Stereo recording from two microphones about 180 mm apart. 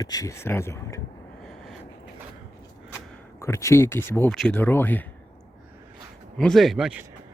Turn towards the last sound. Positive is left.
turn(degrees=-5)  # may be behind; listen again after turning